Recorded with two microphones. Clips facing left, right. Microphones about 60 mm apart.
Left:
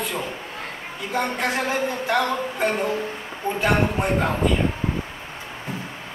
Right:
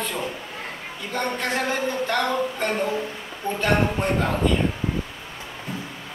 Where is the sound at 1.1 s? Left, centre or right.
Centre.